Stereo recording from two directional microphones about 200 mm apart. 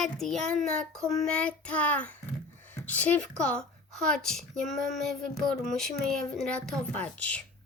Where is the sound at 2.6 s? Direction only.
10° left (ahead or behind).